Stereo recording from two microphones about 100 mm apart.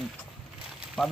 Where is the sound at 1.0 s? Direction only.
5° left (ahead or behind).